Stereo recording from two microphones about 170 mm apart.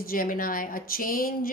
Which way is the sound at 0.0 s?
55° left (ahead or behind).